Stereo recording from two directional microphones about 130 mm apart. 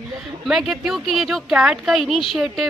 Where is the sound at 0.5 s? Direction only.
Centre (ahead or behind).